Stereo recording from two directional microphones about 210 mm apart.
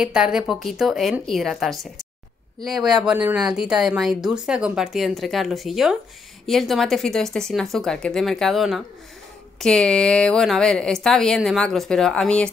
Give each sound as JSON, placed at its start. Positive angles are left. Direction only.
{"t": 0.0, "sound": "speech", "side_deg": -5}